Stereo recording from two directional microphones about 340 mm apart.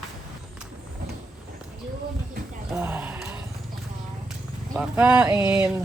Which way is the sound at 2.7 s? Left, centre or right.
Centre.